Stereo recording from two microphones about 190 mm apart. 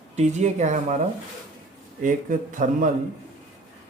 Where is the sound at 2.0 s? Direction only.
45° right (ahead or behind).